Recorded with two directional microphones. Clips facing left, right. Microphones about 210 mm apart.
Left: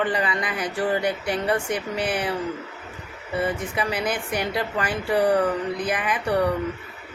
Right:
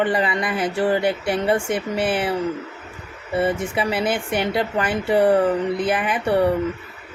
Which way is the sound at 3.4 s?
25° right (ahead or behind).